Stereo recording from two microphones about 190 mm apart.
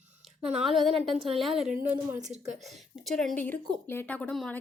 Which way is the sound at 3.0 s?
Centre (ahead or behind).